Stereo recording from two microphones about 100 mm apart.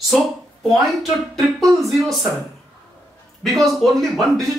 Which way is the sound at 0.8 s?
Centre (ahead or behind).